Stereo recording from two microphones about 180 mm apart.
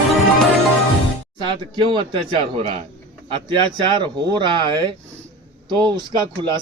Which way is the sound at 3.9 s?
25° right (ahead or behind).